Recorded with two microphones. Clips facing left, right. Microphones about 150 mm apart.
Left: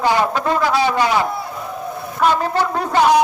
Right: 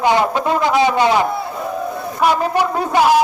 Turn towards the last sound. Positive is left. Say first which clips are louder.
# right 1 dB
turn(degrees=-5)  # may be behind; listen again after turning